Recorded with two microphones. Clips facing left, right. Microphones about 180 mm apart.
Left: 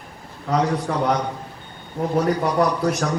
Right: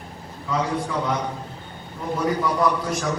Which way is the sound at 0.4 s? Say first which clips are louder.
Left 4 dB; 55° left (ahead or behind).